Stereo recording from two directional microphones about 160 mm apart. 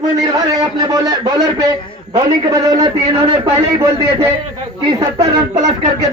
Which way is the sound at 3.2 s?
35° right (ahead or behind).